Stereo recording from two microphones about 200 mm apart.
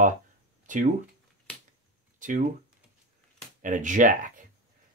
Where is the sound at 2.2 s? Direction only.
40° right (ahead or behind).